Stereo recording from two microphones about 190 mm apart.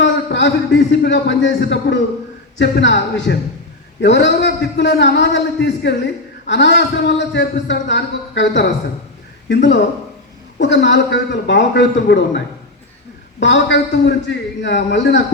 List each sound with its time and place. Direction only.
0.0 s a man's voice: 70° left (ahead or behind)
10.6 s a man's voice: 70° left (ahead or behind)
13.4 s a man's voice: 70° left (ahead or behind)